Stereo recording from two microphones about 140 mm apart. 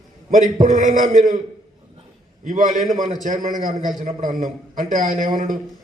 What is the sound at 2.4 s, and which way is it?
A man's voice, 70° right (ahead or behind).